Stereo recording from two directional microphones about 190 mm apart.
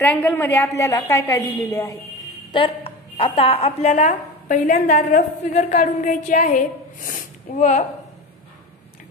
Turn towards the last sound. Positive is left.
turn(degrees=40)  # may be behind; listen again after turning